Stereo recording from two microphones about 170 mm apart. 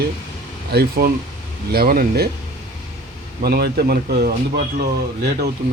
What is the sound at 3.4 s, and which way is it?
Speech, 65° right (ahead or behind).